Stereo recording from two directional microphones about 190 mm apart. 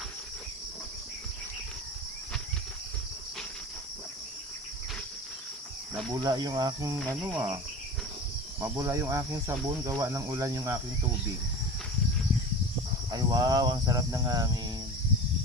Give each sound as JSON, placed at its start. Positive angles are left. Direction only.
{"t": 6.1, "sound": "cricket", "side_deg": -20}
{"t": 7.2, "sound": "speech", "side_deg": -10}
{"t": 8.8, "sound": "speech", "side_deg": -15}
{"t": 13.1, "sound": "cricket", "side_deg": -20}